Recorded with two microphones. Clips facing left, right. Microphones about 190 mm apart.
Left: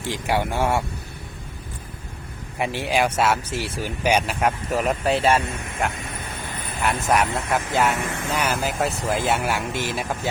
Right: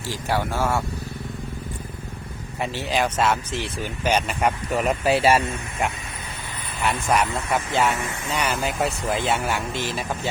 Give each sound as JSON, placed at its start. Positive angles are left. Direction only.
{"t": 0.0, "sound": "speech", "side_deg": 15}
{"t": 2.6, "sound": "speech", "side_deg": 10}